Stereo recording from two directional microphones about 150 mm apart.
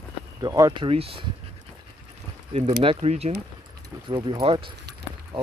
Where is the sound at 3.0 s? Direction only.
45° right (ahead or behind).